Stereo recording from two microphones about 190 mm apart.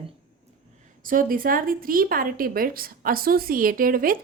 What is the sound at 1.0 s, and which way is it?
A woman's voice, 45° right (ahead or behind).